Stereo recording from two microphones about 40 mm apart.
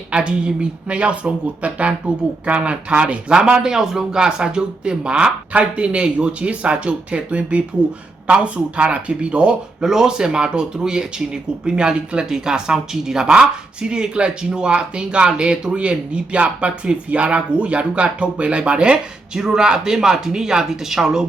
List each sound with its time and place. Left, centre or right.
0.1 s speech: right
3.3 s speech: centre
9.8 s speech: centre
13.2 s speech: right